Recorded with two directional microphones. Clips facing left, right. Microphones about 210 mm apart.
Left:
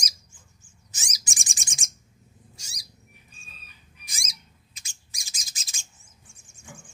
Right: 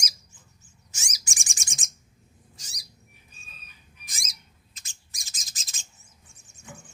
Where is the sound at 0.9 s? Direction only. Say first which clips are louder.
Left 1 dB; 35° left (ahead or behind).